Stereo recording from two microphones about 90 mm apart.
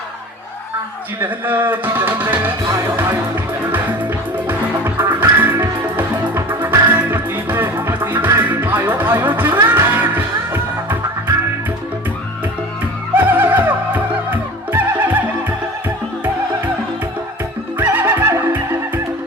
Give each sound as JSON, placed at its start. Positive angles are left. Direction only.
{"t": 1.2, "sound": "speech", "side_deg": -20}
{"t": 4.9, "sound": "music", "side_deg": -20}
{"t": 13.1, "sound": "music", "side_deg": -20}
{"t": 17.7, "sound": "music", "side_deg": -20}